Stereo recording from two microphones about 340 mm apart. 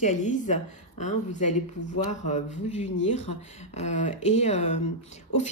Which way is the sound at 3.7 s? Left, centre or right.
Centre.